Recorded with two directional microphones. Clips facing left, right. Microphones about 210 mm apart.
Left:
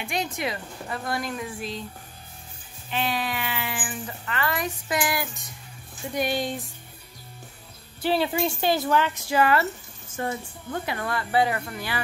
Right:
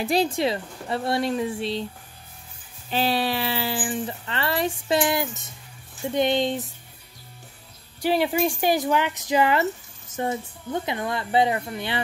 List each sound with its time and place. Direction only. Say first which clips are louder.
0.0 s speech: right 7 dB; 35° right (ahead or behind)
2.9 s speech: right 4 dB; 35° right (ahead or behind)
8.0 s speech: right 2 dB; 15° right (ahead or behind)